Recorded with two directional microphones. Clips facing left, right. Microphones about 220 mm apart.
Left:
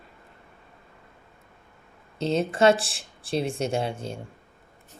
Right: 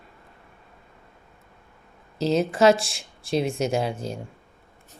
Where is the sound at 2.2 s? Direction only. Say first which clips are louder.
Right 2 dB; 30° left (ahead or behind).